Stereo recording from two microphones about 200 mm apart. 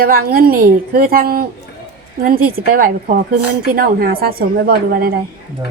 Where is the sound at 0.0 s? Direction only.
50° right (ahead or behind).